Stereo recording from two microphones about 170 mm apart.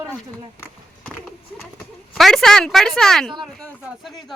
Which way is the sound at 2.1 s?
Centre (ahead or behind).